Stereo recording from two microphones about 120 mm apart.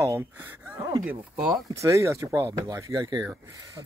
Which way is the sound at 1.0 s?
5° right (ahead or behind).